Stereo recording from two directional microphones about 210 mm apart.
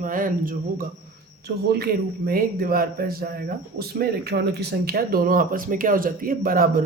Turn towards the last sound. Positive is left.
turn(degrees=-45)  # may be behind; listen again after turning